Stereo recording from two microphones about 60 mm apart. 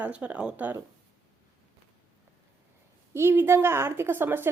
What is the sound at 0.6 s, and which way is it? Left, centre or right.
Speech, right.